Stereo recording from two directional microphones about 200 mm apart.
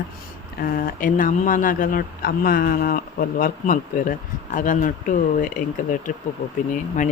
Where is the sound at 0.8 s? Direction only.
45° left (ahead or behind).